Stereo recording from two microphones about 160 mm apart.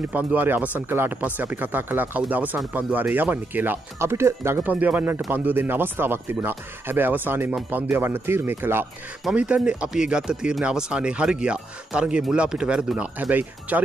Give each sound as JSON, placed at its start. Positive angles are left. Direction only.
{"t": 0.1, "sound": "speech", "side_deg": -10}